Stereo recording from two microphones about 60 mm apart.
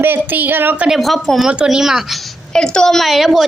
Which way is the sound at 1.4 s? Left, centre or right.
Centre.